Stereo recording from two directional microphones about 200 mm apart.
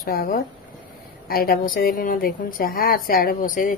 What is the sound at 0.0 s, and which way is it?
A woman's voice, 45° left (ahead or behind).